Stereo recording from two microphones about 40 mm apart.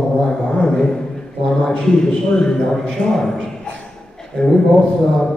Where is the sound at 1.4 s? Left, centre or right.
Left.